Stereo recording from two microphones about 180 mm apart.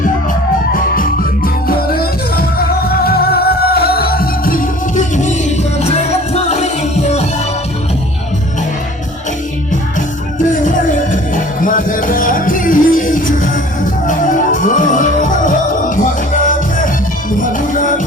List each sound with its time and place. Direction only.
1.6 s music: 55° left (ahead or behind); by 7.3 s 35° left (ahead or behind)
10.3 s music: 45° left (ahead or behind)